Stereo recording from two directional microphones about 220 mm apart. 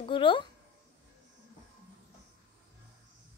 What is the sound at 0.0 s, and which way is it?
Speech, 20° left (ahead or behind).